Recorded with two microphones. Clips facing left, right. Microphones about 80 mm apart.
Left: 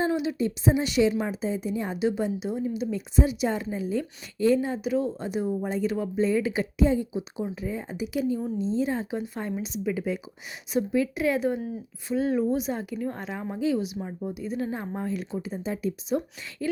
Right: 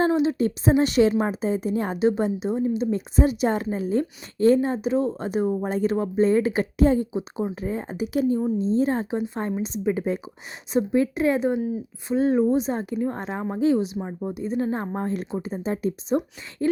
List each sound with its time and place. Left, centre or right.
0.1 s a sound: right
0.3 s a woman's voice: right
2.0 s speech: right
2.9 s a woman's voice: right
5.2 s a woman's voice: right
9.5 s a woman's voice: right